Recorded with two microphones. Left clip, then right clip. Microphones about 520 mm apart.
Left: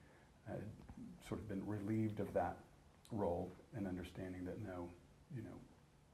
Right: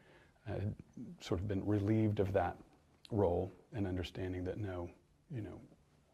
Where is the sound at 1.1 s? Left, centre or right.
Right.